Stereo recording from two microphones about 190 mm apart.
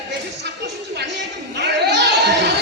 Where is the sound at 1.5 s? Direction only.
65° right (ahead or behind).